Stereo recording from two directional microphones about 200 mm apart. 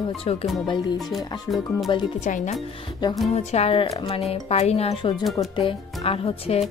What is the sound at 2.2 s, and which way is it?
Speech, 40° left (ahead or behind).